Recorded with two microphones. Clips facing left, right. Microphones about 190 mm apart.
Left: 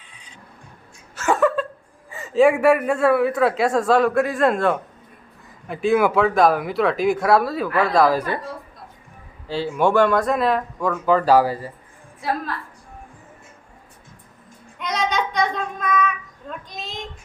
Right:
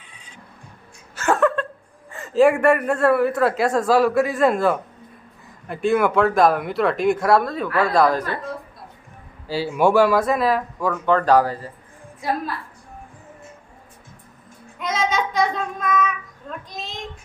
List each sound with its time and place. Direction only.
1.1 s a sound: centre (ahead or behind)
2.0 s a man's voice: centre (ahead or behind)
9.5 s a man's voice: 10° right (ahead or behind); by 11.7 s 10° left (ahead or behind)
14.8 s child singing: 5° right (ahead or behind)